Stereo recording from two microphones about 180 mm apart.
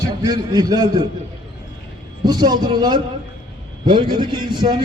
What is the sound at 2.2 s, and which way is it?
A man's voice, 20° right (ahead or behind).